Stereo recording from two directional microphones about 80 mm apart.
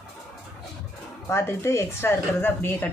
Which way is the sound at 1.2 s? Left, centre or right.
Left.